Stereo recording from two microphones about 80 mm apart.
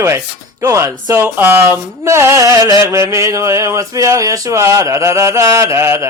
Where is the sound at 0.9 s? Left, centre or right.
Right.